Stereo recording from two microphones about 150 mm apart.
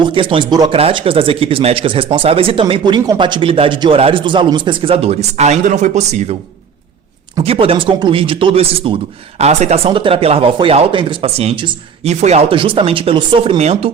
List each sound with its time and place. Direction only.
0.1 s speech: 35° right (ahead or behind)
7.4 s speech: 40° right (ahead or behind)
9.4 s speech: 45° right (ahead or behind)
12.0 s speech: 45° right (ahead or behind); by 13.6 s 30° right (ahead or behind)
13.6 s speech: 45° right (ahead or behind)